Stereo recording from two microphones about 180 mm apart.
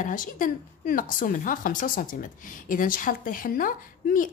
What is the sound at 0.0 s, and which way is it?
A woman's voice, 50° left (ahead or behind).